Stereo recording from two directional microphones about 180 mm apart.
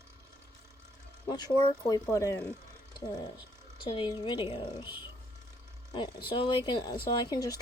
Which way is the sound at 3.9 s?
25° left (ahead or behind).